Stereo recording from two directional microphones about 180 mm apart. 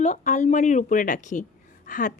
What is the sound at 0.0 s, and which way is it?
A woman's voice, 40° left (ahead or behind).